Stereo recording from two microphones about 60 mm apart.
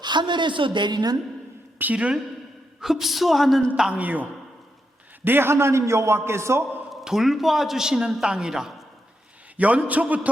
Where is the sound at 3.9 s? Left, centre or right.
Right.